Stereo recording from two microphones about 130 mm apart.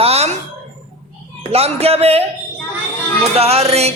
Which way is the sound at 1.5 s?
50° right (ahead or behind).